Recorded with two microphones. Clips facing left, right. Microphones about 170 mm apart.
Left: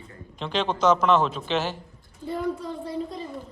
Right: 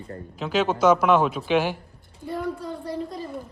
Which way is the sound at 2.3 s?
Centre (ahead or behind).